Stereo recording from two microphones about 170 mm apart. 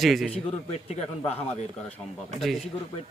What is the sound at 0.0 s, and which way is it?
Speech, centre (ahead or behind).